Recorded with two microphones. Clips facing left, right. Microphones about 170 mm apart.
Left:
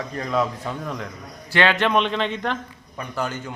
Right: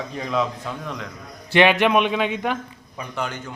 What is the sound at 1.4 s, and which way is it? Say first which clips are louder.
Speech: right 4 dB; 20° right (ahead or behind).